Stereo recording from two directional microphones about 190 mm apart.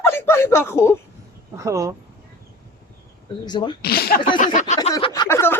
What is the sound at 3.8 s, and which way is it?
Speech, 55° left (ahead or behind).